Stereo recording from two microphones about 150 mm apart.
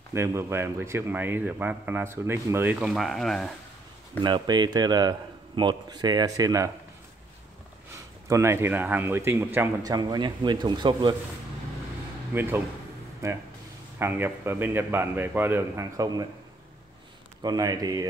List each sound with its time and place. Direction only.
0.1 s a man's voice: 20° right (ahead or behind)
2.9 s speech: centre (ahead or behind)
4.2 s speech: 30° right (ahead or behind)
8.3 s a man's voice: 20° right (ahead or behind)
9.8 s speech: 25° right (ahead or behind)
12.4 s a man's voice: 15° right (ahead or behind)
17.4 s speech: 25° right (ahead or behind)